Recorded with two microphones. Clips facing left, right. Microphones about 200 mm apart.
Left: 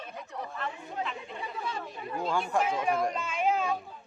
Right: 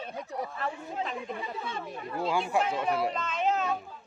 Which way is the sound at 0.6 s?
40° right (ahead or behind).